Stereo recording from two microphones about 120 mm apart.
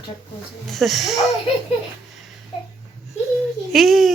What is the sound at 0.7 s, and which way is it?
Speech, centre (ahead or behind).